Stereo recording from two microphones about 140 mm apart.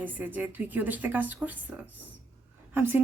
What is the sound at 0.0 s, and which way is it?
A woman's voice, 10° right (ahead or behind).